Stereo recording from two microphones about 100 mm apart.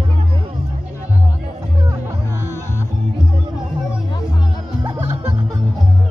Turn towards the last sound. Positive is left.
turn(degrees=-20)  # may be behind; listen again after turning